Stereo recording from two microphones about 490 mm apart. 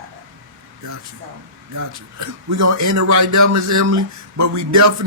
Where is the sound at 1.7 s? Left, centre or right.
Right.